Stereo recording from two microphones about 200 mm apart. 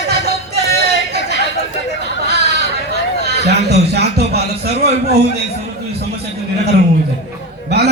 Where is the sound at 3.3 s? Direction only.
55° right (ahead or behind).